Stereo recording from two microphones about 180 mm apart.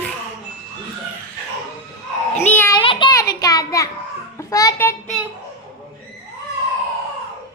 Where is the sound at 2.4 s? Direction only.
10° left (ahead or behind).